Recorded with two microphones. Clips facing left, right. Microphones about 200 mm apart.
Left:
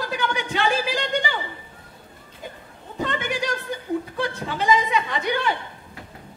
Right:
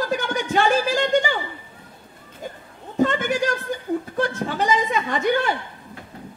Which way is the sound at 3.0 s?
45° right (ahead or behind).